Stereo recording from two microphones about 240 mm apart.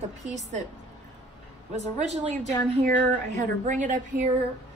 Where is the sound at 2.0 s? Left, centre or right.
Right.